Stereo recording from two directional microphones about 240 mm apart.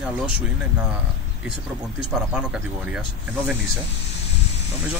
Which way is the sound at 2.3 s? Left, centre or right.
Centre.